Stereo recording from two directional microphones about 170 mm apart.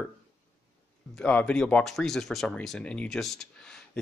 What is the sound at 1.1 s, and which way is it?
Speech, 5° left (ahead or behind).